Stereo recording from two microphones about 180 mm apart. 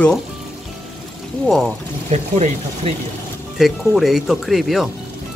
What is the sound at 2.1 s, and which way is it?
Speech, 40° right (ahead or behind).